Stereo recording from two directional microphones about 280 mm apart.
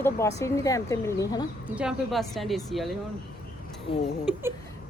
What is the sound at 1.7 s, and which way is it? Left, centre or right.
A woman's voice, centre.